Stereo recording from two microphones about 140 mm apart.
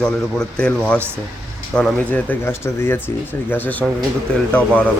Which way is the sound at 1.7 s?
5° left (ahead or behind).